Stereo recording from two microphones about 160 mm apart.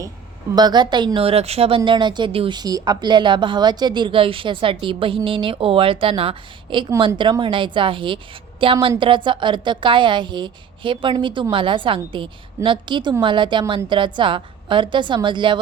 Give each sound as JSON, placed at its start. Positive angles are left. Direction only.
{"t": 0.5, "sound": "a woman's voice", "side_deg": -25}